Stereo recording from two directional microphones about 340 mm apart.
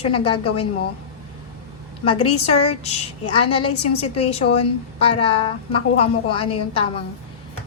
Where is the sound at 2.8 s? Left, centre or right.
Centre.